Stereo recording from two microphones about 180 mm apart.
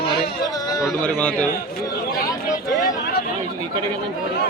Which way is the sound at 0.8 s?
5° left (ahead or behind).